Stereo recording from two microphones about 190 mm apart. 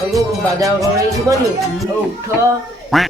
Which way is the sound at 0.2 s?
15° right (ahead or behind).